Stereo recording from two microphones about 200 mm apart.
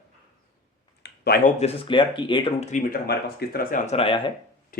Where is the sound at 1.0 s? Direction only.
50° left (ahead or behind).